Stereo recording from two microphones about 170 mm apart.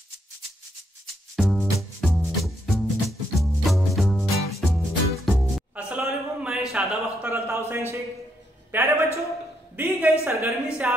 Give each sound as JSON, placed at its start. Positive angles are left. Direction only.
{"t": 1.3, "sound": "music", "side_deg": 0}
{"t": 7.3, "sound": "a woman's voice", "side_deg": -15}